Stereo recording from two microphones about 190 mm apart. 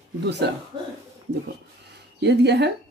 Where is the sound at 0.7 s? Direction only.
25° right (ahead or behind).